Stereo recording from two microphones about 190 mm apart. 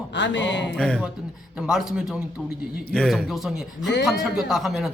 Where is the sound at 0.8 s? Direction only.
5° left (ahead or behind).